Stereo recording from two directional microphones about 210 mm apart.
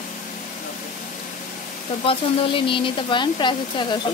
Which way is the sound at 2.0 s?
25° left (ahead or behind).